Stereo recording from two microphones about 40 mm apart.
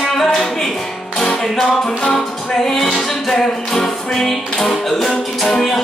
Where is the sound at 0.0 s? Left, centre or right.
Centre.